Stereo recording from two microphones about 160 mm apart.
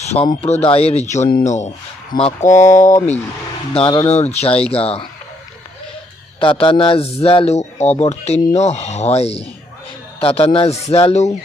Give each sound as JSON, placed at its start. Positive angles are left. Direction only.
{"t": 0.0, "sound": "speech", "side_deg": 45}
{"t": 3.8, "sound": "speech", "side_deg": 35}
{"t": 6.4, "sound": "speech", "side_deg": 35}